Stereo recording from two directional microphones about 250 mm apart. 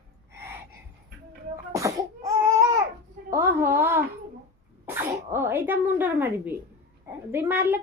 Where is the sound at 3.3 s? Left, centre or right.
Centre.